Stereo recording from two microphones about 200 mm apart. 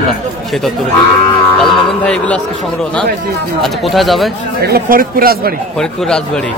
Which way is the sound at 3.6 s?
Centre (ahead or behind).